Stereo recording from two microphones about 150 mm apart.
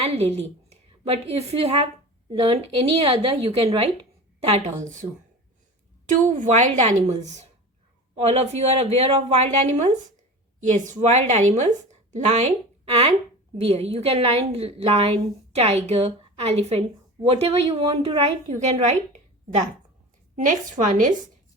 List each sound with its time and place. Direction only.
0.0 s a woman's voice: 45° right (ahead or behind)
6.1 s a woman's voice: 55° right (ahead or behind); by 18.3 s 40° right (ahead or behind)
18.4 s a woman's voice: 50° right (ahead or behind)
20.3 s a woman's voice: 55° right (ahead or behind)